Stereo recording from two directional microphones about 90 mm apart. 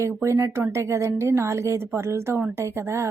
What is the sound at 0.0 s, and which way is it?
A woman's voice, 35° right (ahead or behind).